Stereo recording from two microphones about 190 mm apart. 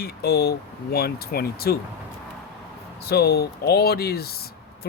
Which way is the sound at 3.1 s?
60° left (ahead or behind).